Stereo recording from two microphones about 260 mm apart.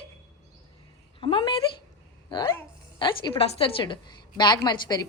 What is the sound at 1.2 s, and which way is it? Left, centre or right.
A woman's voice, centre.